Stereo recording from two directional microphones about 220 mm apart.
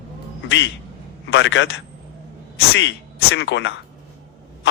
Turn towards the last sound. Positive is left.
turn(degrees=55)  # may be behind; listen again after turning